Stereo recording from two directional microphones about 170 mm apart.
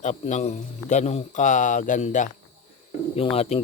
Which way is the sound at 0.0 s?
45° left (ahead or behind).